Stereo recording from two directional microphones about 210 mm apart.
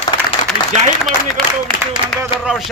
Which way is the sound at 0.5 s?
45° left (ahead or behind).